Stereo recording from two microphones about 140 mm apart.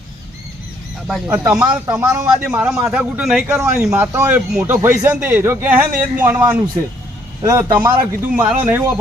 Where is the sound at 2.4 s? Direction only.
10° right (ahead or behind).